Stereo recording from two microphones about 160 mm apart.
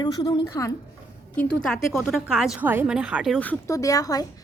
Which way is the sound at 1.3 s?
10° left (ahead or behind).